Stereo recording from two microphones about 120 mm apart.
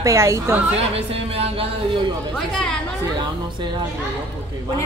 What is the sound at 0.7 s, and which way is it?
Speech, 55° right (ahead or behind).